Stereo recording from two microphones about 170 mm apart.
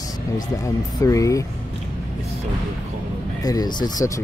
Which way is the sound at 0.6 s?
20° left (ahead or behind).